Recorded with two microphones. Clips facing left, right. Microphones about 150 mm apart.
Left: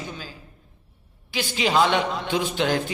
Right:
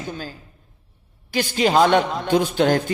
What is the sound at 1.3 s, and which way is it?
A man's voice, 45° right (ahead or behind).